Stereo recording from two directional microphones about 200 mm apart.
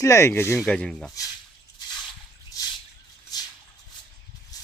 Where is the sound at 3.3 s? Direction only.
20° left (ahead or behind).